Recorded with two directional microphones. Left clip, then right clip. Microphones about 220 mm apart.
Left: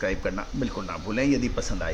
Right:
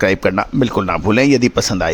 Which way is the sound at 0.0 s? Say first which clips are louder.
Right 14 dB; 50° right (ahead or behind).